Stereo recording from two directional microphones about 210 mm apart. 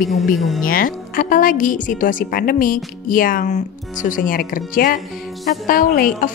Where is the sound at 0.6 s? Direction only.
40° left (ahead or behind).